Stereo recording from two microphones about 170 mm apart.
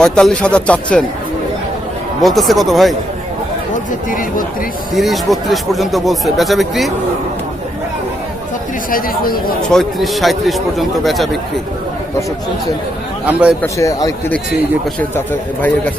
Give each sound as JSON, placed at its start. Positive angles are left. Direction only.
{"t": 0.0, "sound": "speech", "side_deg": 5}
{"t": 2.2, "sound": "speech", "side_deg": 0}
{"t": 4.9, "sound": "speech", "side_deg": 0}
{"t": 8.9, "sound": "speech", "side_deg": 55}
{"t": 9.7, "sound": "speech", "side_deg": 0}
{"t": 13.2, "sound": "a man's voice", "side_deg": -5}
{"t": 13.6, "sound": "a man's voice", "side_deg": 20}